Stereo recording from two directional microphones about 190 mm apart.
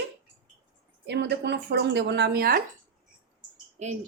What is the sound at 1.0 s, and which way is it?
Speech, 60° right (ahead or behind).